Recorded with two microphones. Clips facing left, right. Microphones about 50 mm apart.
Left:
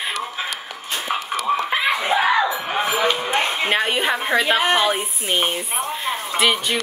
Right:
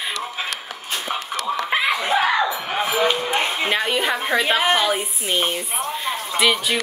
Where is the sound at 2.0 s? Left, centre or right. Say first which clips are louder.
Left 1 dB; centre.